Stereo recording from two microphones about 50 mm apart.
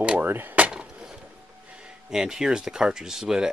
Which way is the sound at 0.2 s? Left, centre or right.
Right.